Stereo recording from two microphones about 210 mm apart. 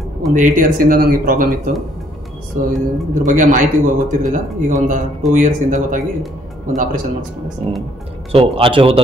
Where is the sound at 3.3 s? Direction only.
40° right (ahead or behind).